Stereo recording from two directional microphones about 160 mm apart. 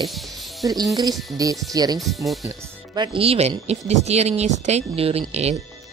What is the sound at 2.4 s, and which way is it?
Speech, 25° right (ahead or behind).